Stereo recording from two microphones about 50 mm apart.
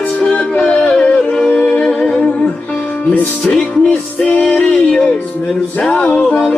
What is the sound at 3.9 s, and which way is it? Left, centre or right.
Music, left.